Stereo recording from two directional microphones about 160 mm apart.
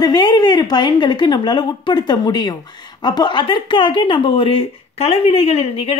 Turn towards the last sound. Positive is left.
turn(degrees=40)  # may be behind; listen again after turning